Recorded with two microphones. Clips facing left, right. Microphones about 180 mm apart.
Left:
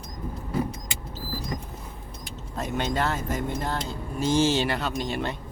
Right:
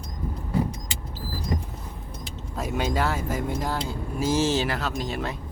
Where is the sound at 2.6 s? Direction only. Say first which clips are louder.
Right 1 dB; 5° right (ahead or behind).